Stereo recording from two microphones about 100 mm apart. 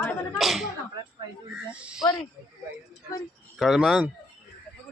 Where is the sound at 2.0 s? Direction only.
40° left (ahead or behind).